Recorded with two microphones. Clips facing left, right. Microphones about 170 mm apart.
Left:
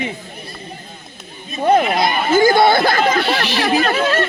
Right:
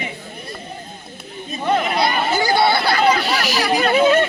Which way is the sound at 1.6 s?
45° left (ahead or behind).